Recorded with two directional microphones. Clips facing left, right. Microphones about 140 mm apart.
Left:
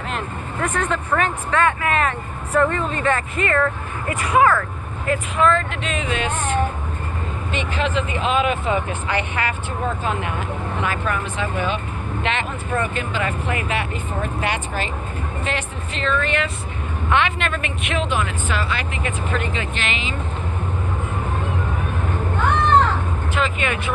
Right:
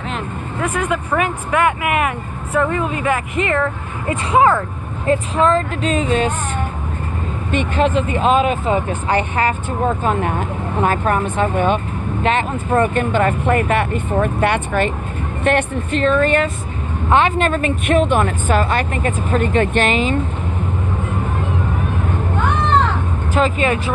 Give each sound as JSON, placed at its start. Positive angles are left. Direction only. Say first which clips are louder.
{"t": 0.1, "sound": "speech", "louder": "right 2 dB", "side_deg": -5}
{"t": 7.5, "sound": "speech", "louder": "right 7 dB", "side_deg": -45}
{"t": 23.3, "sound": "speech", "louder": "right 7 dB", "side_deg": -35}